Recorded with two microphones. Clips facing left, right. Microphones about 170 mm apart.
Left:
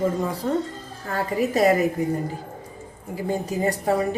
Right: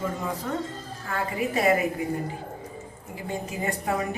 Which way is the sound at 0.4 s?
35° left (ahead or behind).